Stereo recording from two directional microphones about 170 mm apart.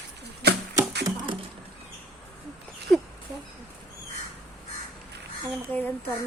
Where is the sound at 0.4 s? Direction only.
75° right (ahead or behind).